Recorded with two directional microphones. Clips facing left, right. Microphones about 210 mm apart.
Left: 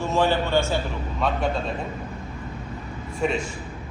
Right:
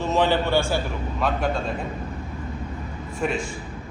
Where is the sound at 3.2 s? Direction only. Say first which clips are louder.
Left 1 dB; centre (ahead or behind).